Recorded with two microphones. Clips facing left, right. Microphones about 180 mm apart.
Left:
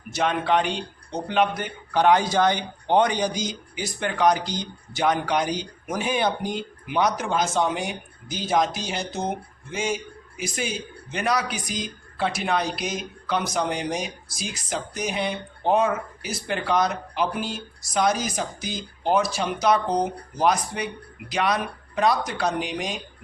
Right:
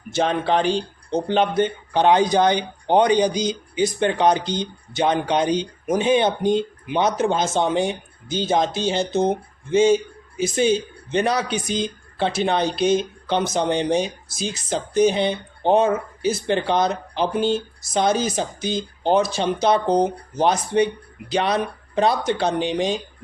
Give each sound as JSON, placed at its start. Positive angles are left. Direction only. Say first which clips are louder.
{"t": 0.1, "sound": "a man's voice", "louder": "right 2 dB", "side_deg": -30}